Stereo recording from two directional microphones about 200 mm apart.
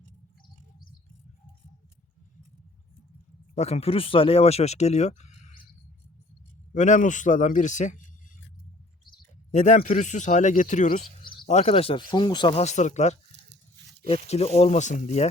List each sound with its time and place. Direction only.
3.5 s speech: 30° left (ahead or behind)
6.7 s speech: 40° left (ahead or behind)
9.5 s speech: 40° left (ahead or behind)